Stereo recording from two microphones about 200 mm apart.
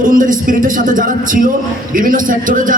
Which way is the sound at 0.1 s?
40° right (ahead or behind).